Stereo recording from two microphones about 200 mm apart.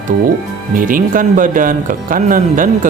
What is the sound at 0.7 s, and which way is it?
Speech, 45° right (ahead or behind).